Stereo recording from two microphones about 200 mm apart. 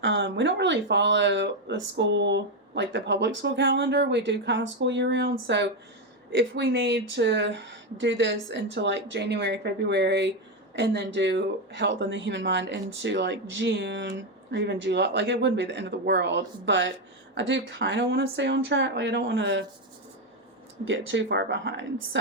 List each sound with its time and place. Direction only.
0.0 s speech: 65° right (ahead or behind)
20.8 s speech: 65° right (ahead or behind)